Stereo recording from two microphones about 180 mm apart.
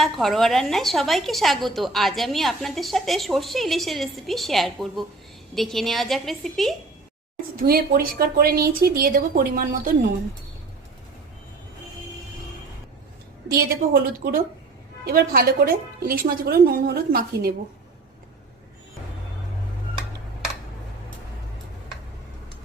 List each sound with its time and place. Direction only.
0.0 s a woman's voice: centre (ahead or behind)
7.5 s a woman's voice: 55° right (ahead or behind)
13.5 s a woman's voice: 55° right (ahead or behind)